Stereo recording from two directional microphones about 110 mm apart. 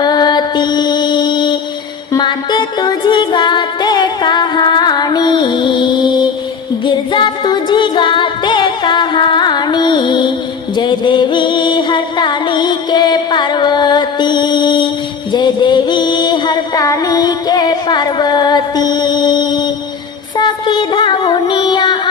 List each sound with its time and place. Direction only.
0.0 s mantra: 40° left (ahead or behind)
2.1 s music: 45° left (ahead or behind)